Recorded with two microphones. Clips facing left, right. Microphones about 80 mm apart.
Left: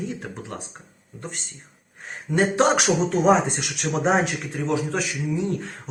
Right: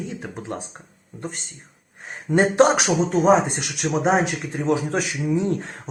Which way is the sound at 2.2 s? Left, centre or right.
Right.